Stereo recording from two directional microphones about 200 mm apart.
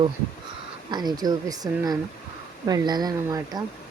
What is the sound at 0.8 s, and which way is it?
Speech, 20° right (ahead or behind).